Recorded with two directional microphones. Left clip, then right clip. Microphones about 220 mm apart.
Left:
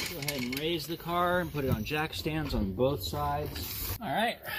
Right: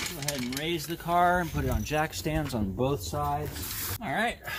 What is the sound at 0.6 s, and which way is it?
Speech, 30° right (ahead or behind).